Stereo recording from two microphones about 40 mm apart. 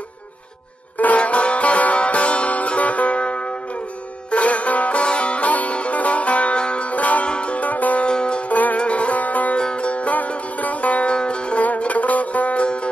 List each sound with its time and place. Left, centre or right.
0.9 s music: left
8.1 s music: left
8.5 s music: left
8.7 s music: left
9.6 s music: left
11.8 s music: left